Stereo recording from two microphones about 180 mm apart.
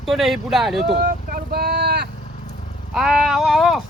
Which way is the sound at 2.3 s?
40° left (ahead or behind).